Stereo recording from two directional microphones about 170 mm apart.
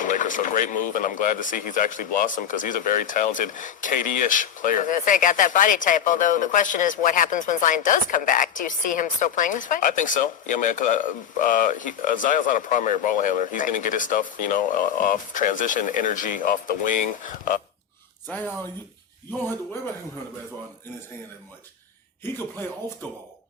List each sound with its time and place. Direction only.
0.0 s speech: 50° left (ahead or behind)